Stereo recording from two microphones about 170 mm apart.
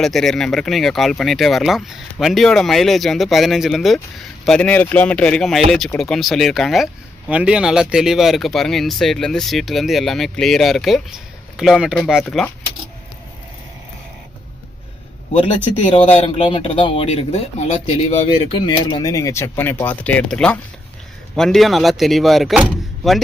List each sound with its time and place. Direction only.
0.0 s speech: centre (ahead or behind)
16.2 s speech: 35° left (ahead or behind)
18.6 s speech: 30° left (ahead or behind); by 22.6 s centre (ahead or behind)